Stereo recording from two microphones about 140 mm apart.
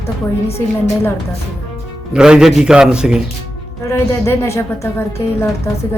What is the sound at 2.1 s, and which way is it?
Speech, 5° right (ahead or behind).